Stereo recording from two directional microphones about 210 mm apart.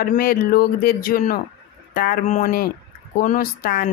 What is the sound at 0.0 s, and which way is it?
Speech, 45° left (ahead or behind).